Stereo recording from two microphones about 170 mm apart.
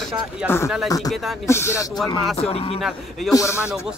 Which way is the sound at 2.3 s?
35° left (ahead or behind).